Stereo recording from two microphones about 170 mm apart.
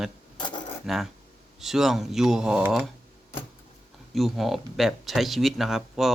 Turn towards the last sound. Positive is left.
turn(degrees=0)  # may be behind; listen again after turning